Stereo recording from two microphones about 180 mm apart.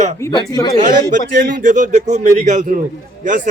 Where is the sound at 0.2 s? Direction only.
20° left (ahead or behind).